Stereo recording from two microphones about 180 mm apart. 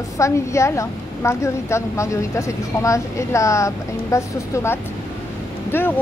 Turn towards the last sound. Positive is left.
turn(degrees=10)  # may be behind; listen again after turning